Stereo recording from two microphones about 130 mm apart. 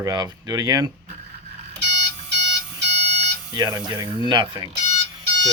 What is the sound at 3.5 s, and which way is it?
Speech, 30° right (ahead or behind).